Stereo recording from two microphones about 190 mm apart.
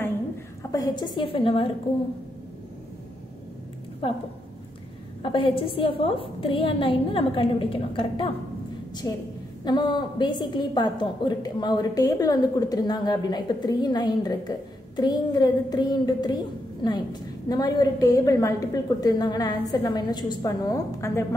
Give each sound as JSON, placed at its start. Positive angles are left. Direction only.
{"t": 0.7, "sound": "a woman's voice", "side_deg": 20}
{"t": 4.0, "sound": "a woman's voice", "side_deg": 30}
{"t": 5.2, "sound": "a woman's voice", "side_deg": 25}
{"t": 9.7, "sound": "a woman's voice", "side_deg": 25}